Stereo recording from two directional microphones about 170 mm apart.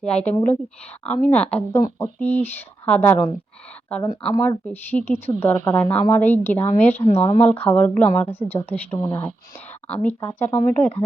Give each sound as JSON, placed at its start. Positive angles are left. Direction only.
{"t": 0.0, "sound": "a woman's voice", "side_deg": 5}
{"t": 7.1, "sound": "speech", "side_deg": 35}
{"t": 7.3, "sound": "a woman's voice", "side_deg": 10}